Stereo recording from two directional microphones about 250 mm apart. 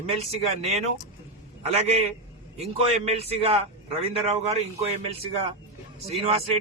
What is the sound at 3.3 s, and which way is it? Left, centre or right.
A man's voice, right.